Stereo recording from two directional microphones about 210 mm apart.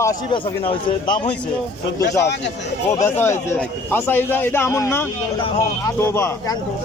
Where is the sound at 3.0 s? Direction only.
10° left (ahead or behind).